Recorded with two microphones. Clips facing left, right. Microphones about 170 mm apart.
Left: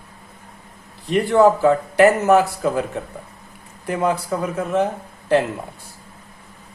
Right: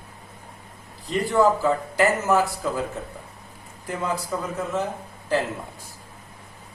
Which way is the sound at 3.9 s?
65° left (ahead or behind).